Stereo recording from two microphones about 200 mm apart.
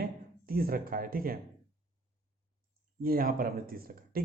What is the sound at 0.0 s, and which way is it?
Speech, 50° right (ahead or behind).